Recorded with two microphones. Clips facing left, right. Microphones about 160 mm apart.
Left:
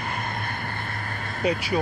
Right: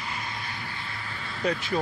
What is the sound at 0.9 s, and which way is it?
Vehicle, 50° left (ahead or behind).